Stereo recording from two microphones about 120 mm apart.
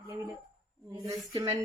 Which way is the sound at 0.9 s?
30° right (ahead or behind).